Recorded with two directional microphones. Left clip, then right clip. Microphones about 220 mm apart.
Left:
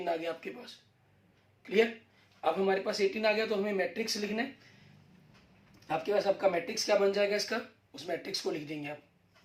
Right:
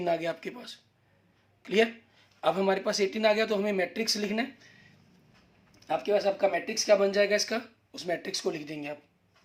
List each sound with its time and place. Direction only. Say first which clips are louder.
0.0 s speech: right 5 dB; 50° right (ahead or behind)
5.9 s speech: right 3 dB; 50° right (ahead or behind)